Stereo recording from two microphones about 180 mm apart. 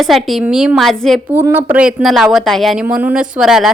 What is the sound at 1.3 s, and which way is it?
A woman's voice, 10° right (ahead or behind).